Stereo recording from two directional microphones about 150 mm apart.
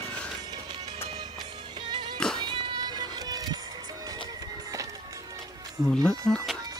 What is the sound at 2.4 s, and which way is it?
Music, 30° right (ahead or behind).